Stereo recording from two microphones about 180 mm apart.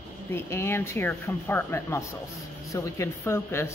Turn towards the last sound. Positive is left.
turn(degrees=15)  # may be behind; listen again after turning